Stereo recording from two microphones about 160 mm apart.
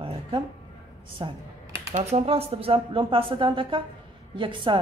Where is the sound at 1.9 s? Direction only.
45° right (ahead or behind).